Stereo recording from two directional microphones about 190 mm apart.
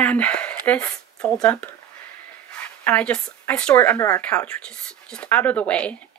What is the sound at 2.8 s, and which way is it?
A woman's voice, 5° left (ahead or behind).